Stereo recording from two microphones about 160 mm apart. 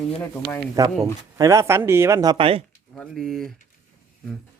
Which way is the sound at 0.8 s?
20° right (ahead or behind).